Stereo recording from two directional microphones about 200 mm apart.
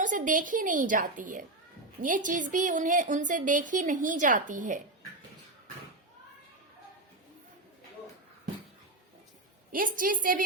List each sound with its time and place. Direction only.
0.0 s a woman's voice: 40° right (ahead or behind)
9.7 s a woman's voice: 45° right (ahead or behind)